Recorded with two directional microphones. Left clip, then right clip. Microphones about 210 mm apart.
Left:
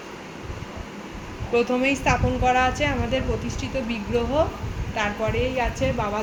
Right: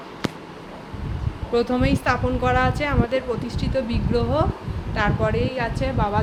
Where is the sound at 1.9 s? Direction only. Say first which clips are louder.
Even; 15° right (ahead or behind).